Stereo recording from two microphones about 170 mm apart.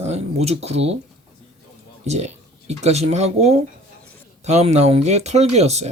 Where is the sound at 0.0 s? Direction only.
40° right (ahead or behind).